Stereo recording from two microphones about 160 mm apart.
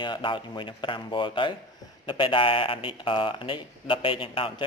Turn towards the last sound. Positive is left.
turn(degrees=35)  # may be behind; listen again after turning